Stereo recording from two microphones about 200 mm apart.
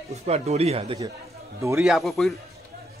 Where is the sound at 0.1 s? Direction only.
30° right (ahead or behind).